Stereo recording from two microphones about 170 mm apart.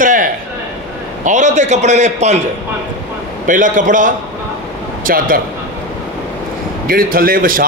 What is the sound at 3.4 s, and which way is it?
A man's voice, 50° right (ahead or behind).